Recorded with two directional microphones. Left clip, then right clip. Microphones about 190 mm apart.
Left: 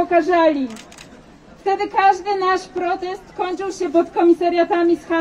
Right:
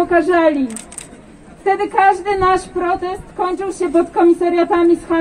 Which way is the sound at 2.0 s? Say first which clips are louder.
Right 2 dB; 35° left (ahead or behind).